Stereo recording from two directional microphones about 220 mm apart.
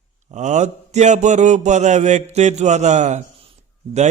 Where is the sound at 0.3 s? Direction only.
30° right (ahead or behind).